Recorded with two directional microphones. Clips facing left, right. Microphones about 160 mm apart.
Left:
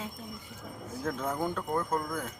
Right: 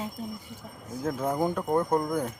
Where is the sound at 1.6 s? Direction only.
30° right (ahead or behind).